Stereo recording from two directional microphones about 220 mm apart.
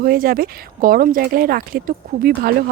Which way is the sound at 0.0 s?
40° right (ahead or behind).